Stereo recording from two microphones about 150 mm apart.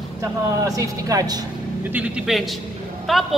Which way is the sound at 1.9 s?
10° right (ahead or behind).